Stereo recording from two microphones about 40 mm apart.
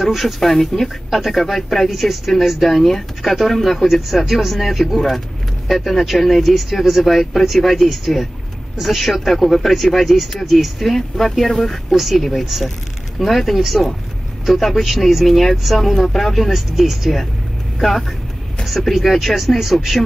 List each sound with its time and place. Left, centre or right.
0.0 s speech: centre